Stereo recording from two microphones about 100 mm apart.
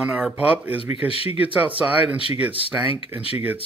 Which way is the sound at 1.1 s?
75° left (ahead or behind).